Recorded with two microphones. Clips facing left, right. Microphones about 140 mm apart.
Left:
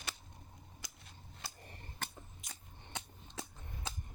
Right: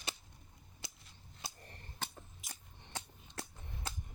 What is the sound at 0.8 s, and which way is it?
Cap gun, 25° right (ahead or behind).